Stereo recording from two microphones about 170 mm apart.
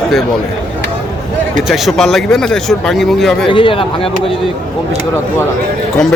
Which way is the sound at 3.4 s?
30° left (ahead or behind).